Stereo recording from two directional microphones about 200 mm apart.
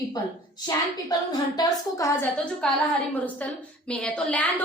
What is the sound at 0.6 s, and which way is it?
A woman's voice, 20° left (ahead or behind).